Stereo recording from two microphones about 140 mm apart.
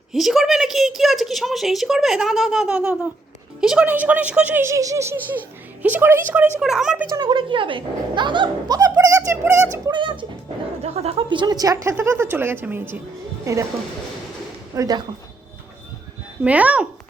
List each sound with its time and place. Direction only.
0.1 s a woman's voice: centre (ahead or behind)
6.6 s a woman's voice: 5° right (ahead or behind)
7.2 s speech: 35° right (ahead or behind); by 9.6 s 20° right (ahead or behind)
9.9 s speech: 35° right (ahead or behind)
10.8 s a woman's voice: 50° right (ahead or behind); by 13.7 s 20° right (ahead or behind)
14.8 s a woman's voice: 30° right (ahead or behind)
16.4 s speech: 10° right (ahead or behind)